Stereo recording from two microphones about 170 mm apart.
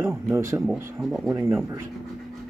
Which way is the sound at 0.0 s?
15° right (ahead or behind).